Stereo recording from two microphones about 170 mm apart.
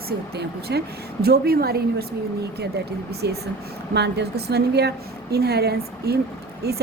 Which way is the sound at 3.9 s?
80° right.